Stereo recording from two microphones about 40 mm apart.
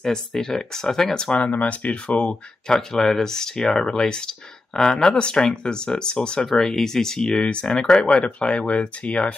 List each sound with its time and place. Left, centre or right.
0.0 s speech: centre
1.3 s speech: left
2.7 s speech: centre
6.5 s speech: centre; by 9.3 s left